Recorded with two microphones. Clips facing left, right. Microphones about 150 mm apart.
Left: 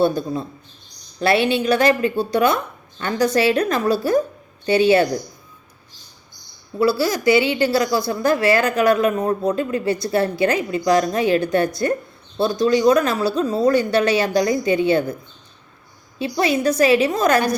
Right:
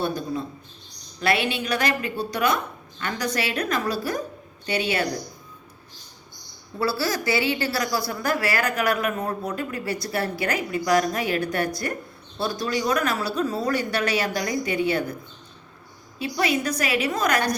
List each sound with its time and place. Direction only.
0.0 s a woman's voice: 30° left (ahead or behind)
6.7 s a woman's voice: 15° left (ahead or behind)
16.1 s a woman's voice: 30° left (ahead or behind)